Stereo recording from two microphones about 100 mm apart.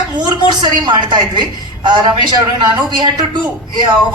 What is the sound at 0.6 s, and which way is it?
A woman's voice, 50° right (ahead or behind).